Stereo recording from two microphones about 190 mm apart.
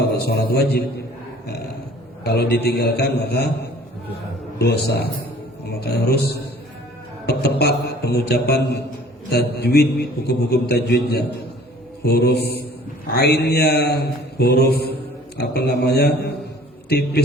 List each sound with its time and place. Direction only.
0.0 s a man's voice: 60° left (ahead or behind)
2.2 s a man's voice: 60° left (ahead or behind)